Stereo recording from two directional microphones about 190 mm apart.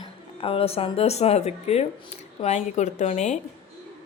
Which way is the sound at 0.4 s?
30° left (ahead or behind).